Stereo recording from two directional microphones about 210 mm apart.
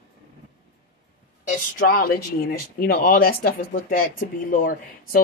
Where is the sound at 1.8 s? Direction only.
45° left (ahead or behind).